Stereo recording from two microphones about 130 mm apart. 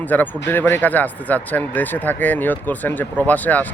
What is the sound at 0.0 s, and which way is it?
Speech, 15° left (ahead or behind).